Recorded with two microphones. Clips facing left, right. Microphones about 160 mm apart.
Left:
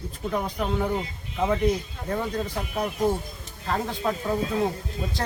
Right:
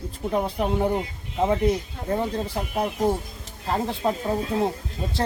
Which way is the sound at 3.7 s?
30° right (ahead or behind).